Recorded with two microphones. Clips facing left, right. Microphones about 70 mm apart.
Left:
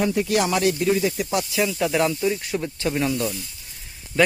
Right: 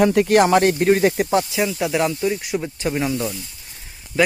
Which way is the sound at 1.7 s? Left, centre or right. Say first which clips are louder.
Right 1 dB; centre.